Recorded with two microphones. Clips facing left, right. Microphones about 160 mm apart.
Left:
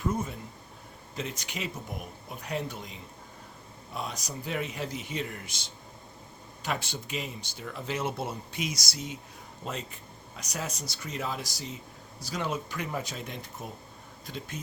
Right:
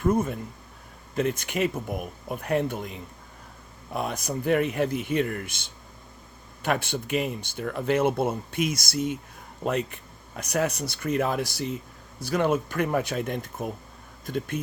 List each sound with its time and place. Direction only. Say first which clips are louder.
0.0 s speech: right 8 dB; 55° right (ahead or behind)